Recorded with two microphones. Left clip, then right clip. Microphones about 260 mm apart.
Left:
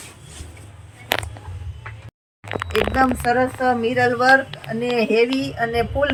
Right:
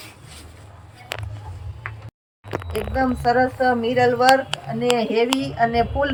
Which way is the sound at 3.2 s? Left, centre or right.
Centre.